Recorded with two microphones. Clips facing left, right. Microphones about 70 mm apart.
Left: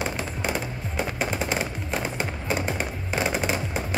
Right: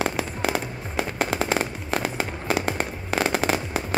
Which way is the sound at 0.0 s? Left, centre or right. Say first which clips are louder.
Right 3 dB; right.